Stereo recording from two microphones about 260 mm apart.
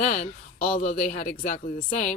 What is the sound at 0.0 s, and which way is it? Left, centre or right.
Speech, left.